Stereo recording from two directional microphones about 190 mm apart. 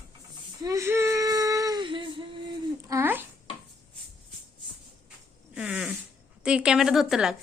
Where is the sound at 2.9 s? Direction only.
10° right (ahead or behind).